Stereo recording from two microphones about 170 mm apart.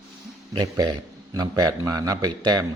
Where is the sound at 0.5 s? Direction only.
20° right (ahead or behind).